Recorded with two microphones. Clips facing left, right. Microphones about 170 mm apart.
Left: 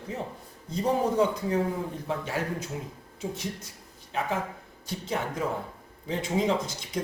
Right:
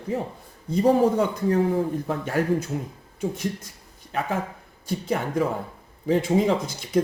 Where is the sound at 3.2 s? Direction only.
55° right (ahead or behind).